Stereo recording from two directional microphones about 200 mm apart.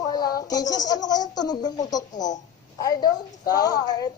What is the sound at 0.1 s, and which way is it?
Speech, 20° left (ahead or behind).